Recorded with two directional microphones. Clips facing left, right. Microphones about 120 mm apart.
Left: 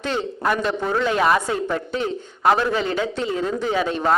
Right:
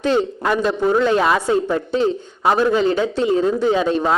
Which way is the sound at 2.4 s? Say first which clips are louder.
Right 1 dB; 5° right (ahead or behind).